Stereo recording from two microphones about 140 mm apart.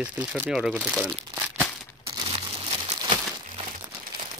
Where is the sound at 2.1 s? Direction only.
40° right (ahead or behind).